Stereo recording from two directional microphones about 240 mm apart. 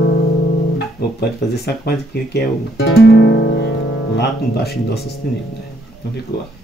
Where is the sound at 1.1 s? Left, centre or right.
Left.